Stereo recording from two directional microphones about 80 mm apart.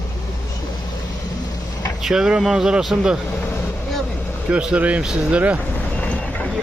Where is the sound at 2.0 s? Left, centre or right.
Centre.